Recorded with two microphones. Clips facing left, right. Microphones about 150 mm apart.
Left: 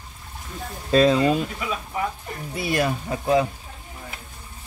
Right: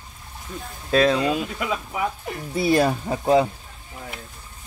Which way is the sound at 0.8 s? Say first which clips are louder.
Left 2 dB; centre (ahead or behind).